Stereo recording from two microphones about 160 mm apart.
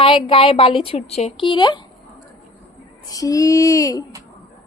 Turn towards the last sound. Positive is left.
turn(degrees=20)  # may be behind; listen again after turning